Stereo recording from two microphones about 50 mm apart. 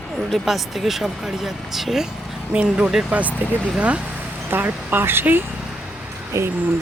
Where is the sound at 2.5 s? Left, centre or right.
Right.